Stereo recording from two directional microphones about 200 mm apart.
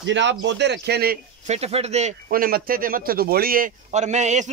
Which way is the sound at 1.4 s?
30° right (ahead or behind).